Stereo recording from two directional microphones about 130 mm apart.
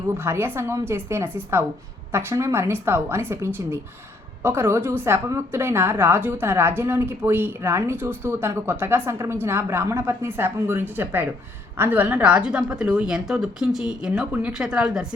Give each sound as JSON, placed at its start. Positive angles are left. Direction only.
{"t": 0.1, "sound": "a woman's voice", "side_deg": -20}